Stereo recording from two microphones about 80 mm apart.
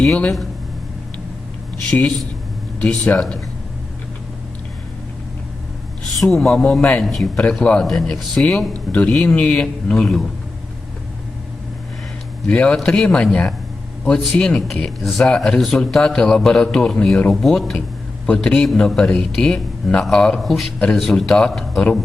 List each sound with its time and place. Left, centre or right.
0.0 s speech: centre
1.9 s a man's voice: left
6.3 s speech: centre
7.0 s speech: centre
12.5 s speech: centre